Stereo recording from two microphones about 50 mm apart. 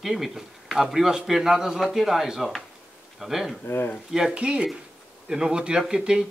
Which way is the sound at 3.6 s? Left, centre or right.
Left.